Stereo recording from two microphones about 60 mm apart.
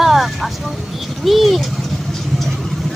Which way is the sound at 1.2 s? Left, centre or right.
Centre.